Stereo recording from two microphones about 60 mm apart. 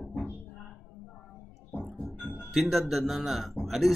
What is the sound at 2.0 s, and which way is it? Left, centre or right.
Music, left.